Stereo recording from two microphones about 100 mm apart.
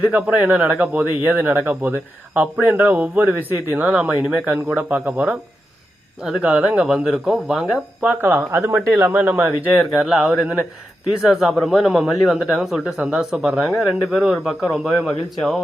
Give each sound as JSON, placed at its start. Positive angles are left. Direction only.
{"t": 0.0, "sound": "speech", "side_deg": -15}
{"t": 6.4, "sound": "a man's voice", "side_deg": -15}
{"t": 8.0, "sound": "a man's voice", "side_deg": -20}
{"t": 15.4, "sound": "a man's voice", "side_deg": 0}